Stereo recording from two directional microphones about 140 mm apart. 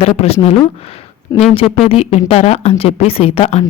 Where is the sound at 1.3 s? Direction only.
25° left (ahead or behind).